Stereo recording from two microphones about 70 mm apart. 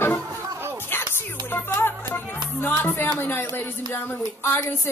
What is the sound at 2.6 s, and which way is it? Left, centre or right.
A woman's voice, left.